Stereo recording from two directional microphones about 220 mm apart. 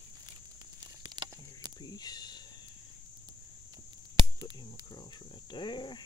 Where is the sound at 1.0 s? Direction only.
20° right (ahead or behind).